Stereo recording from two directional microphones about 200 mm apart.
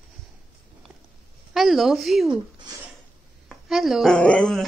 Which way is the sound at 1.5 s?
Centre (ahead or behind).